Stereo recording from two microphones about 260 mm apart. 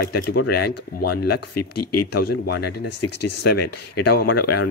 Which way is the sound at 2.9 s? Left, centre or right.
Left.